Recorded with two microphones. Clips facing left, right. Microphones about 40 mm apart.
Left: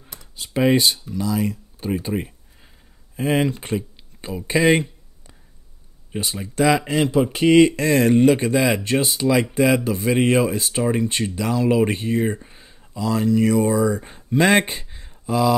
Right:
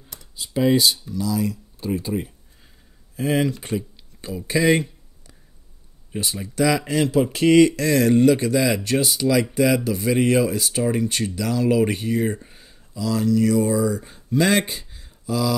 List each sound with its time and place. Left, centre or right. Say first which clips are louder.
0.4 s speech: left 1 dB; left
3.2 s speech: left 1 dB; left
6.5 s speech: left 2 dB; left
7.2 s speech: left 1 dB; centre
7.7 s speech: left 1 dB; left
12.3 s speech: left 1 dB; centre; by 15.5 s left